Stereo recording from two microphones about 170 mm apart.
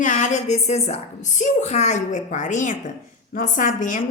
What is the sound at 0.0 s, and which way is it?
A woman's voice, 50° left (ahead or behind).